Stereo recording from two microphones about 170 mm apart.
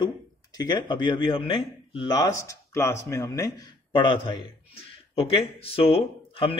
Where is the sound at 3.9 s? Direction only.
30° left (ahead or behind).